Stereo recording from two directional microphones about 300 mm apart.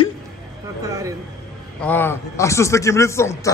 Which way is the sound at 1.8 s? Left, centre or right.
Centre.